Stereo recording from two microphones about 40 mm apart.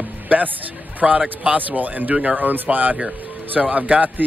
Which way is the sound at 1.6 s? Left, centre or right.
Right.